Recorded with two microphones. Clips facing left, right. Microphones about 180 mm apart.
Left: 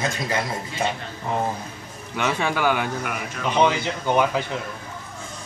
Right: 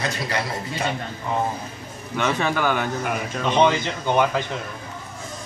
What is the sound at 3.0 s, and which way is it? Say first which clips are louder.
Speech: right 3 dB; 30° right (ahead or behind).